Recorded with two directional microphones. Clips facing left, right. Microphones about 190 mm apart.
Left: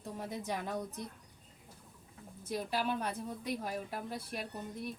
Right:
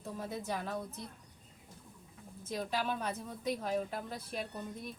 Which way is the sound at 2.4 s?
10° left (ahead or behind).